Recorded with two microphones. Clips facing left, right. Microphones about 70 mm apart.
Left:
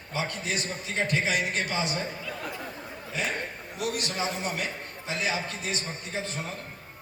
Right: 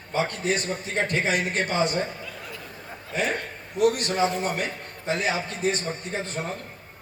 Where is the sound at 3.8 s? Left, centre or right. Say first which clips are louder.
Right 9 dB; right.